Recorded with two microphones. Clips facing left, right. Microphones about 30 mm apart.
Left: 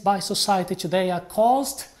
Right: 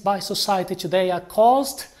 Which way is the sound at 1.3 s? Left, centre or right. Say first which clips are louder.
Right 3 dB; right.